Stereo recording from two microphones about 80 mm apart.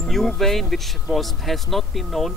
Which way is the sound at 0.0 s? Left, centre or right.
Centre.